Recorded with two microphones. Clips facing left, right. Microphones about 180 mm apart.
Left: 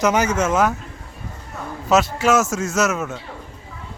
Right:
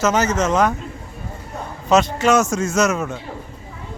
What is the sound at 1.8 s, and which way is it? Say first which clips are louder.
A man's voice: right 1 dB; 5° left (ahead or behind).